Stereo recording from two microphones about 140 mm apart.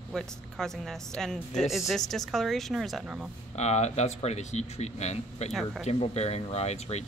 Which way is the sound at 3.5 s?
55° left (ahead or behind).